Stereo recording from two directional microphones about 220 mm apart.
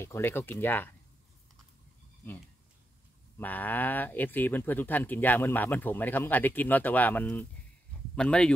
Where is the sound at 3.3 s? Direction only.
10° left (ahead or behind).